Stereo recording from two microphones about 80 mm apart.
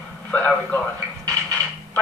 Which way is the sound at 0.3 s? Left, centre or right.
Centre.